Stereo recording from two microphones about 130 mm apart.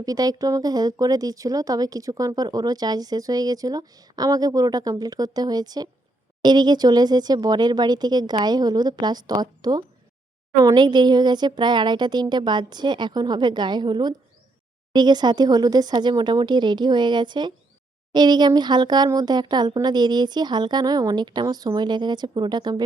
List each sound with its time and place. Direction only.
0.0 s speech: 30° right (ahead or behind)